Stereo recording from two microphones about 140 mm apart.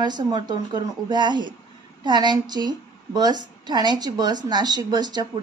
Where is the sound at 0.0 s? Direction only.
30° right (ahead or behind).